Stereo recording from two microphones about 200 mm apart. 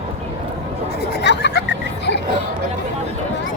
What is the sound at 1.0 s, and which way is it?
Chatter, 60° left (ahead or behind).